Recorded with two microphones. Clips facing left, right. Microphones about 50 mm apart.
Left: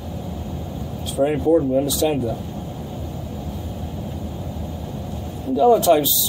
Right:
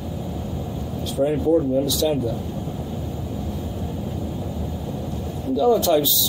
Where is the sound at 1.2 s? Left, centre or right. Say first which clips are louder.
Left 2 dB; centre.